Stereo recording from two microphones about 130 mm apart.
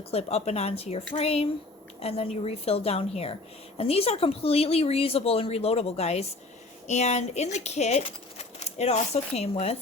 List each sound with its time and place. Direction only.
0.1 s a woman's voice: 50° left (ahead or behind)